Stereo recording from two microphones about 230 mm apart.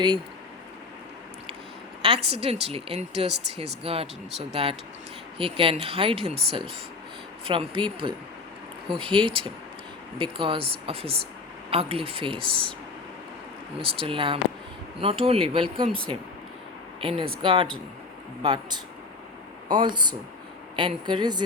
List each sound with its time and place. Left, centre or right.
2.0 s speech: right
13.7 s speech: right
17.0 s speech: right